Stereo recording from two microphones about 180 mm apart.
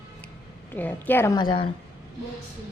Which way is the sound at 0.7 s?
10° left (ahead or behind).